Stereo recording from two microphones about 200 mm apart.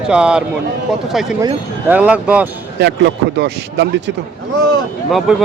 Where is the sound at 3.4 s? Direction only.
60° right (ahead or behind).